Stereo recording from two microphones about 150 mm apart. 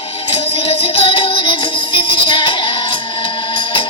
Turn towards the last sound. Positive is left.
turn(degrees=35)  # may be behind; listen again after turning